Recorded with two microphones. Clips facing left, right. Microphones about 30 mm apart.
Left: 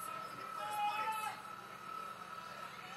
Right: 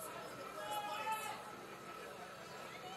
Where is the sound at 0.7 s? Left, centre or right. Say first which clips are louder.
Left 4 dB; left.